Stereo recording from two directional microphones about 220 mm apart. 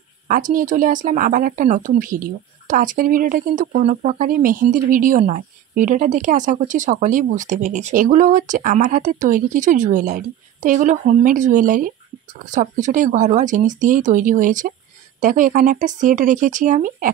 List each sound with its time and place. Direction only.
0.3 s speech: 40° right (ahead or behind)